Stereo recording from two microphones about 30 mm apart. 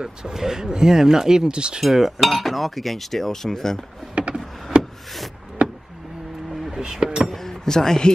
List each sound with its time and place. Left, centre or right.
0.0 s speech: right
1.5 s speech: right
1.8 s speech: centre
4.1 s a sound: right
6.8 s speech: right
7.3 s speech: centre